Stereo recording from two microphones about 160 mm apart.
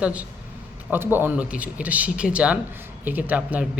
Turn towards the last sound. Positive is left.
turn(degrees=-10)  # may be behind; listen again after turning